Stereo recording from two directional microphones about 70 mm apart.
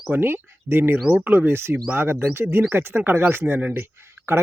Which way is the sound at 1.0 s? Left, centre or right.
Right.